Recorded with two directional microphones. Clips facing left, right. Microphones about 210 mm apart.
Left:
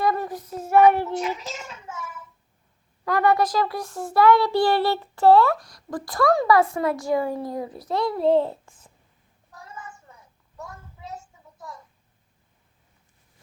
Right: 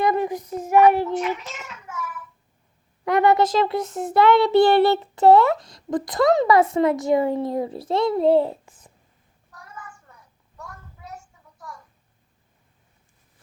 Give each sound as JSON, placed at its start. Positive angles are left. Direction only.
{"t": 0.0, "sound": "child singing", "side_deg": -20}
{"t": 1.6, "sound": "child singing", "side_deg": 25}
{"t": 3.0, "sound": "a child's voice", "side_deg": -20}
{"t": 8.3, "sound": "a child's voice", "side_deg": -15}
{"t": 9.5, "sound": "a sound", "side_deg": 25}